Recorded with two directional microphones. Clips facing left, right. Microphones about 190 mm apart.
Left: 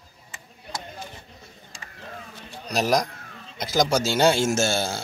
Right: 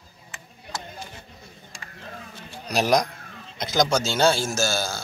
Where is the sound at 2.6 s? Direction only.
Centre (ahead or behind).